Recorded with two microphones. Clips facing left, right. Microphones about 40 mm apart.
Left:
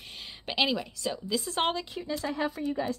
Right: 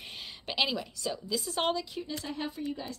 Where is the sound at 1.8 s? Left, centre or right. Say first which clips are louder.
Left 4 dB; left.